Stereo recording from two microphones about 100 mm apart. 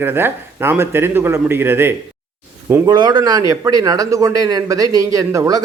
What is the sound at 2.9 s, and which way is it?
A man's voice, 45° right (ahead or behind).